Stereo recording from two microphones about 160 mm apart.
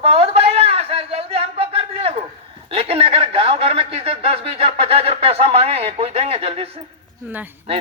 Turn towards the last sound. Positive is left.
turn(degrees=-10)  # may be behind; listen again after turning